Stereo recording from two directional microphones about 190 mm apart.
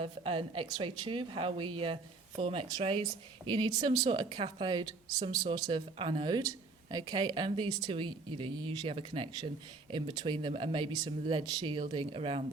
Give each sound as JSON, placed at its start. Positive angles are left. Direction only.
{"t": 0.0, "sound": "a woman's voice", "side_deg": -30}